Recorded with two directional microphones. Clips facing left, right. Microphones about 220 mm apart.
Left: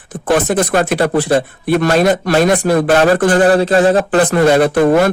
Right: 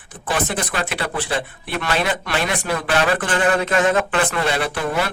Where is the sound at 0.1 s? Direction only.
45° left (ahead or behind).